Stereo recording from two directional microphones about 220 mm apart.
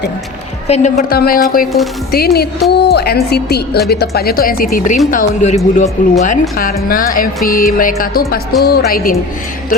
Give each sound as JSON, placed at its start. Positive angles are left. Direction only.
{"t": 0.7, "sound": "music", "side_deg": 30}
{"t": 2.1, "sound": "a woman's voice", "side_deg": 45}
{"t": 5.1, "sound": "music", "side_deg": 30}
{"t": 8.6, "sound": "a woman's voice", "side_deg": 45}